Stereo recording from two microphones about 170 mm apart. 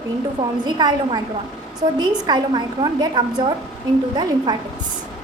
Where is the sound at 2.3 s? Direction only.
25° right (ahead or behind).